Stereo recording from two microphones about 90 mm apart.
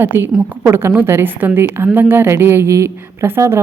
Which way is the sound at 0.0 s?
25° right (ahead or behind).